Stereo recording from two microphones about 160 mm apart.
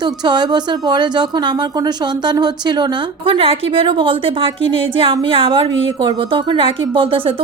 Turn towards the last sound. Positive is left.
turn(degrees=-35)  # may be behind; listen again after turning